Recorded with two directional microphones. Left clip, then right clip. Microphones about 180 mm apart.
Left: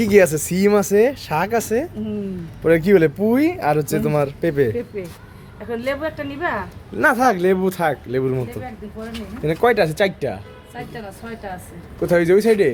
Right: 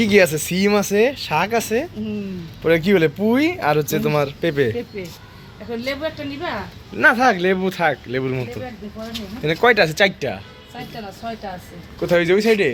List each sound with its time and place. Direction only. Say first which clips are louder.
0.0 s speech: left 1 dB; 15° left (ahead or behind)
5.7 s speech: left 1 dB; 15° left (ahead or behind)
11.9 s speech: left 1 dB; 25° left (ahead or behind)